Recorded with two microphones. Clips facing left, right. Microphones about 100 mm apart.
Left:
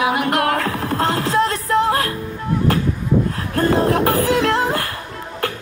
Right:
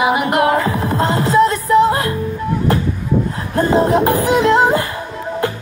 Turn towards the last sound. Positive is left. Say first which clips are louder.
# right 5 dB
turn(degrees=-20)  # may be behind; listen again after turning